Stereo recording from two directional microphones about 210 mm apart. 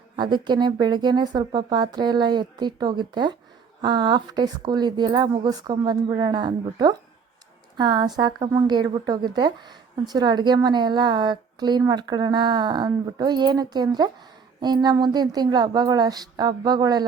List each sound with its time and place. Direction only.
0.2 s a woman's voice: 20° right (ahead or behind)